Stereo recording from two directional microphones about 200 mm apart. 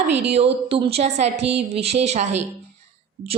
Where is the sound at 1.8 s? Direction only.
30° right (ahead or behind).